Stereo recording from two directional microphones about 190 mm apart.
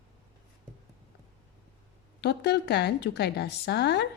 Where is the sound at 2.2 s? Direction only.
60° left (ahead or behind).